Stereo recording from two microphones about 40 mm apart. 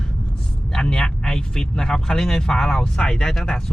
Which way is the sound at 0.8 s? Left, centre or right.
Centre.